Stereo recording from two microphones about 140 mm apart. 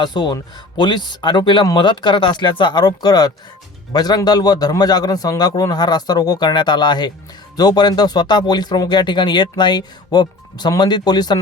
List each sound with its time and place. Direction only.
0.0 s a man's voice: 30° left (ahead or behind)